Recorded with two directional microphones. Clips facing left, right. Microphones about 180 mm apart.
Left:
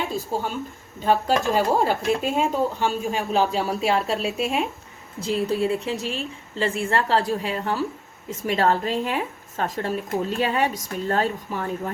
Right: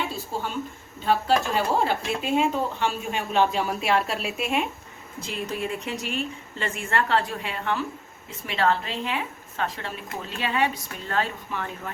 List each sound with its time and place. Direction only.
0.3 s speech: 40° left (ahead or behind)